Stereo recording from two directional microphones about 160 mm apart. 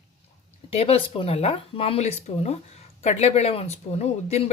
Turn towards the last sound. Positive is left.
turn(degrees=40)  # may be behind; listen again after turning